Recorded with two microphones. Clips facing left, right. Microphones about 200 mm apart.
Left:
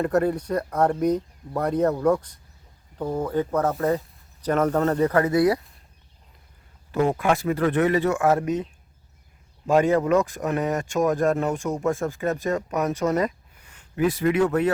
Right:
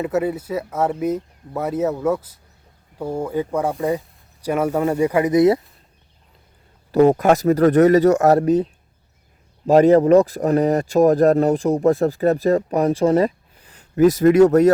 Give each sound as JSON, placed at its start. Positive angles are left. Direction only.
{"t": 0.0, "sound": "speech", "side_deg": -5}
{"t": 6.9, "sound": "speech", "side_deg": -40}